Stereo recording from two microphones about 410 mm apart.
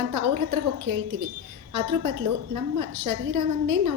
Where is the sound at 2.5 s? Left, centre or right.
Right.